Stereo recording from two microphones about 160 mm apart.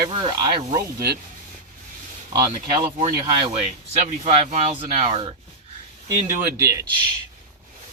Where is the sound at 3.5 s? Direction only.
45° right (ahead or behind).